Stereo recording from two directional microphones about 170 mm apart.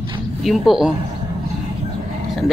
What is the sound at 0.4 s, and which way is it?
Speech, centre (ahead or behind).